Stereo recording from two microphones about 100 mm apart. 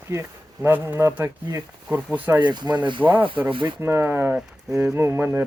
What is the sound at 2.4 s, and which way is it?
Speech, 50° right (ahead or behind).